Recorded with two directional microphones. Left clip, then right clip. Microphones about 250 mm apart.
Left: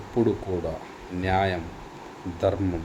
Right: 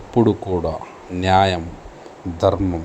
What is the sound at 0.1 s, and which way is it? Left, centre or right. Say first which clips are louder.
A man's voice: right 7 dB; right.